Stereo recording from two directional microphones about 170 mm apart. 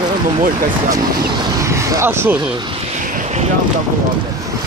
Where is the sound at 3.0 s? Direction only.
45° right (ahead or behind).